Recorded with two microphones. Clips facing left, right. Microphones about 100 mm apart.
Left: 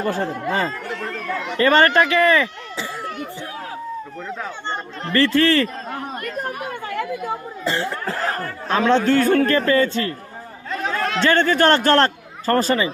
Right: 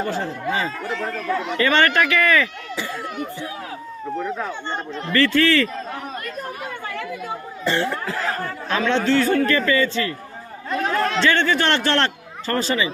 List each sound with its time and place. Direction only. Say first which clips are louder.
0.0 s speech: left 2 dB; 55° left (ahead or behind)
1.5 s speech: left 4 dB; 35° left (ahead or behind)
5.1 s speech: left 1 dB; 35° left (ahead or behind)
7.6 s speech: right 3 dB; 30° left (ahead or behind)
8.1 s speech: left 1 dB; 45° left (ahead or behind)
10.7 s chatter: right 2 dB; centre (ahead or behind)
11.2 s speech: left 6 dB; 45° left (ahead or behind)